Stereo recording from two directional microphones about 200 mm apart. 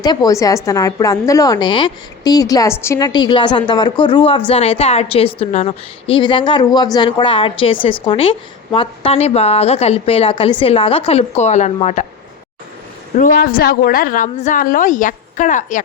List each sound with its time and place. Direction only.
0.0 s a woman's voice: 20° left (ahead or behind); by 12.0 s 35° left (ahead or behind)
13.1 s a woman's voice: 45° left (ahead or behind)